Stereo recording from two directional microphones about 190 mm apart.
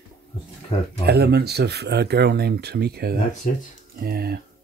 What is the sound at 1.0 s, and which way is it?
Speech, 60° right (ahead or behind).